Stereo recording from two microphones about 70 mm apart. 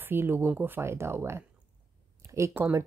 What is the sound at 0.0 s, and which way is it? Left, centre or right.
Speech, right.